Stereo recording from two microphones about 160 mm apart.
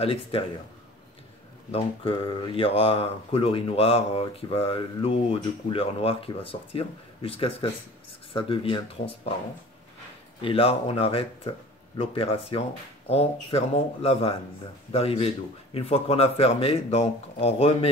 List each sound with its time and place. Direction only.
0.0 s speech: 40° left (ahead or behind)
1.7 s speech: 35° left (ahead or behind)
10.4 s speech: 35° left (ahead or behind)